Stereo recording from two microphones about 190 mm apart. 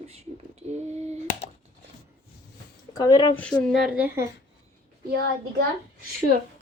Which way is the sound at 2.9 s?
20° left (ahead or behind).